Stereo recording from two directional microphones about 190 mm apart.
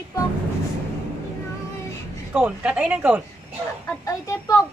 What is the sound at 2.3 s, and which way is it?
Speech, 5° right (ahead or behind).